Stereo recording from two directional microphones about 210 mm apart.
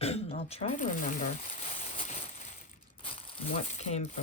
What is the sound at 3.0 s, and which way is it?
Speech, 25° left (ahead or behind).